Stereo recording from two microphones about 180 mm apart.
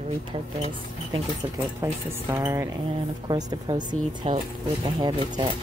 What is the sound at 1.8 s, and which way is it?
Speech, 15° right (ahead or behind).